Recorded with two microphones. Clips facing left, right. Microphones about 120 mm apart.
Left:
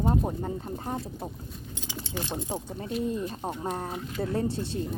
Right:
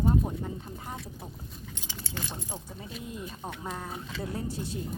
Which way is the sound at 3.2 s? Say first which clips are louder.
Left 6 dB; 30° left (ahead or behind).